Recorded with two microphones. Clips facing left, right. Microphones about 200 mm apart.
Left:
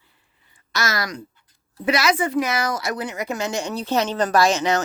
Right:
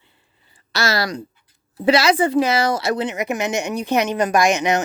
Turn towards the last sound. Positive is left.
turn(degrees=-15)  # may be behind; listen again after turning